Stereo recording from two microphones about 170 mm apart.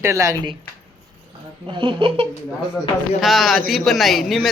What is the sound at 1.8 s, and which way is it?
Speech, 30° right (ahead or behind).